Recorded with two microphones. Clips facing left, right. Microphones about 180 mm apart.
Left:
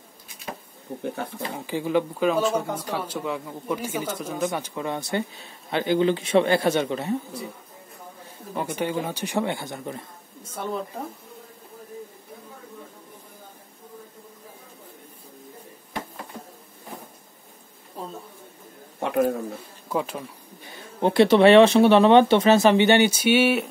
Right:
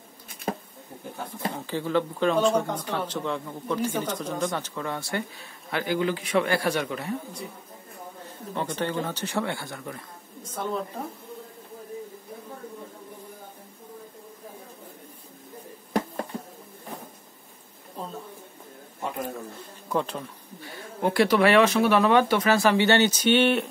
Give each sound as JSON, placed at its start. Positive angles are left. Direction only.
{"t": 0.3, "sound": "a sound", "side_deg": -50}
{"t": 1.0, "sound": "wild animals", "side_deg": 65}
{"t": 1.7, "sound": "speech", "side_deg": 15}
{"t": 8.5, "sound": "speech", "side_deg": 10}
{"t": 10.4, "sound": "speech", "side_deg": 10}
{"t": 18.9, "sound": "a sound", "side_deg": 75}
{"t": 19.9, "sound": "speech", "side_deg": 10}
{"t": 20.6, "sound": "speech", "side_deg": 25}